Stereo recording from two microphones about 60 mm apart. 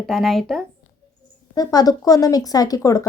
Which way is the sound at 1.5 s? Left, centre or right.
Left.